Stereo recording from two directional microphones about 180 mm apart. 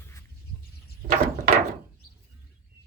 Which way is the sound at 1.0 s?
45° right (ahead or behind).